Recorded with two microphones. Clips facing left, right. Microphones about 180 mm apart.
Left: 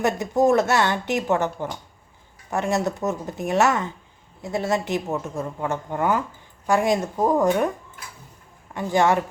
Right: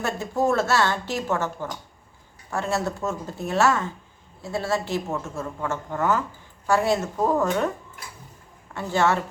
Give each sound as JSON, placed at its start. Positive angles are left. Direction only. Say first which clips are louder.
{"t": 0.0, "sound": "speech", "louder": "left 5 dB", "side_deg": 20}
{"t": 8.7, "sound": "speech", "louder": "left 3 dB", "side_deg": 15}